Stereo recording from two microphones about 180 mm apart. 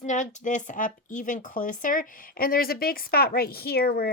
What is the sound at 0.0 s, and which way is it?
Speech, 40° left (ahead or behind).